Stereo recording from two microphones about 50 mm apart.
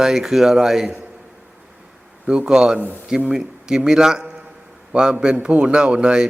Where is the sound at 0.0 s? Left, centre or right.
Centre.